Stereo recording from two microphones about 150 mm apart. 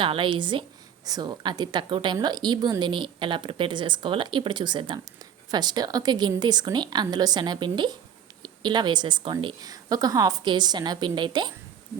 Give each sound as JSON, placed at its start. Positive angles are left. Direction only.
{"t": 0.0, "sound": "a woman's voice", "side_deg": -35}